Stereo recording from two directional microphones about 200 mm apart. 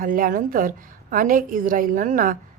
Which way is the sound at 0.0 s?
45° right (ahead or behind).